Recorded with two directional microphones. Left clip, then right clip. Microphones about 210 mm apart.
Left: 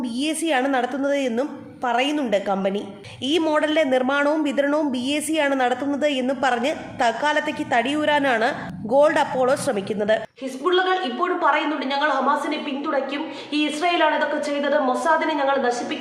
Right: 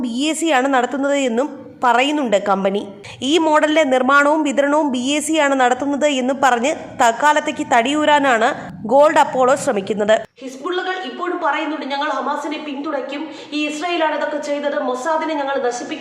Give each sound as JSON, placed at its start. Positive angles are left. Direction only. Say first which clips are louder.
{"t": 0.0, "sound": "a woman's voice", "louder": "right 5 dB", "side_deg": -20}
{"t": 11.5, "sound": "a woman's voice", "louder": "right 1 dB", "side_deg": 5}